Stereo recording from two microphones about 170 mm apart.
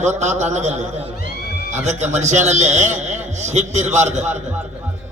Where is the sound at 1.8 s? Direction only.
45° right (ahead or behind).